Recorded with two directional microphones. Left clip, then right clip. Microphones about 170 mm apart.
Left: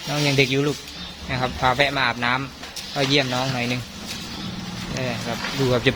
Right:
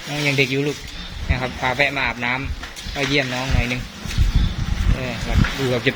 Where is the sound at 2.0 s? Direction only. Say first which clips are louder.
Even; 25° left (ahead or behind).